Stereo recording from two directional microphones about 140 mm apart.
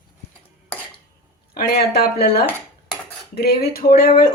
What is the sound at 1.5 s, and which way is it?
Speech, 90° left.